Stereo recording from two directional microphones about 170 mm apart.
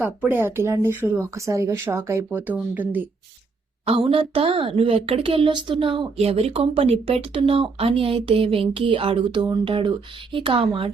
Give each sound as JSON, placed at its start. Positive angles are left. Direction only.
{"t": 0.0, "sound": "speech", "side_deg": -10}
{"t": 3.8, "sound": "a woman's voice", "side_deg": -35}